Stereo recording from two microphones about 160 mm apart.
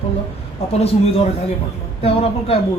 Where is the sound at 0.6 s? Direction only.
40° left (ahead or behind).